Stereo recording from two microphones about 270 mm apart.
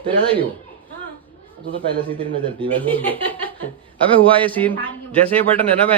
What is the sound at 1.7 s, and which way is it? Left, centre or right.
Speech, centre.